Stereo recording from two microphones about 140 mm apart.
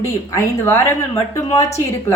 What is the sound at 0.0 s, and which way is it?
A woman's voice, 20° left (ahead or behind).